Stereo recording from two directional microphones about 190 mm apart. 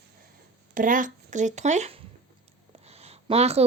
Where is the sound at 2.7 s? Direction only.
35° right (ahead or behind).